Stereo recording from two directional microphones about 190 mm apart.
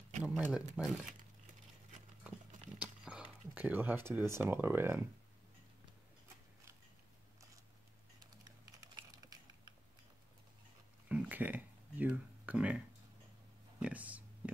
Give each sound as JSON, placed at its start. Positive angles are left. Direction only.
{"t": 0.2, "sound": "speech", "side_deg": -5}
{"t": 2.8, "sound": "speech", "side_deg": -5}
{"t": 8.8, "sound": "typing", "side_deg": -20}
{"t": 11.1, "sound": "a sound", "side_deg": -10}